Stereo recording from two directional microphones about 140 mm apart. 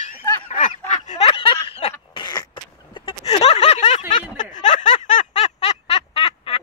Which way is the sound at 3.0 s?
45° left (ahead or behind).